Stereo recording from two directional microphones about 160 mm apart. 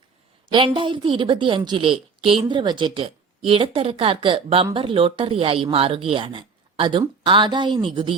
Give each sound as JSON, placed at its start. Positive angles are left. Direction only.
{"t": 0.5, "sound": "a woman's voice", "side_deg": -30}